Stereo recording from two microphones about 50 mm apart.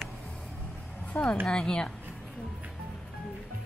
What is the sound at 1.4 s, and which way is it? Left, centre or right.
Speech, centre.